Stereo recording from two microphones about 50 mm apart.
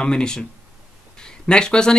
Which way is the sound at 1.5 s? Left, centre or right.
Centre.